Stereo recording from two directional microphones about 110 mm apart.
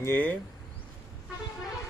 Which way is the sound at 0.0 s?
20° left (ahead or behind).